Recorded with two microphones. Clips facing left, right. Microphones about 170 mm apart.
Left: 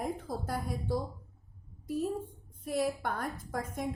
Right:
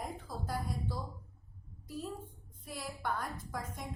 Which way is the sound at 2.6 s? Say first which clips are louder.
Left 9 dB; 50° left (ahead or behind).